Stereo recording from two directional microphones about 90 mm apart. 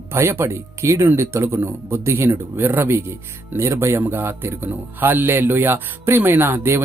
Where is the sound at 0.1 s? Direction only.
25° right (ahead or behind).